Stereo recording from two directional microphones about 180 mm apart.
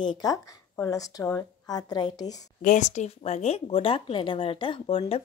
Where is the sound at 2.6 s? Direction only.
45° left (ahead or behind).